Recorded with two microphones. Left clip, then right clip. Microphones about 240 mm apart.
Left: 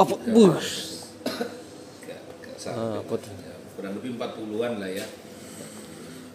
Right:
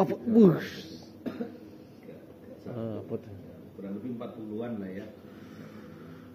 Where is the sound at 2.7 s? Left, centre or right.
Centre.